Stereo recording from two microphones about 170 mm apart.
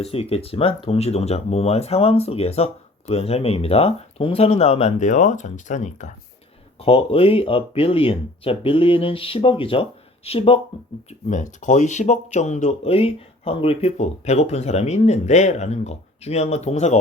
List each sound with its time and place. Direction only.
0.0 s speech: 35° left (ahead or behind)
6.7 s speech: 35° left (ahead or behind)
11.3 s speech: 45° left (ahead or behind)